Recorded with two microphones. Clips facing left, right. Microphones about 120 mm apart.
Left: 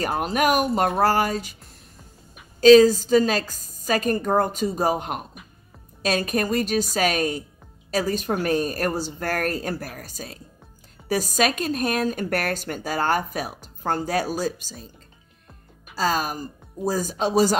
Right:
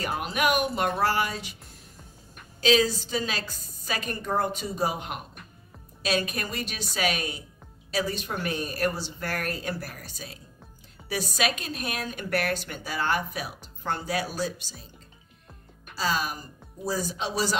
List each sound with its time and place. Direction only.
0.0 s a woman's voice: 40° left (ahead or behind)
2.6 s a woman's voice: 40° left (ahead or behind)
16.0 s speech: 45° left (ahead or behind)